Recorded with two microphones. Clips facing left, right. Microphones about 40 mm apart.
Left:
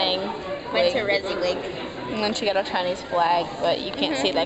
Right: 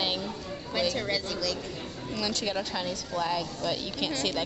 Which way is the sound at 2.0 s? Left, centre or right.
Left.